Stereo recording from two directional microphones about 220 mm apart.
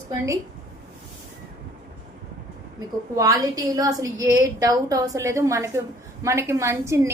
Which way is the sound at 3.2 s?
15° right (ahead or behind).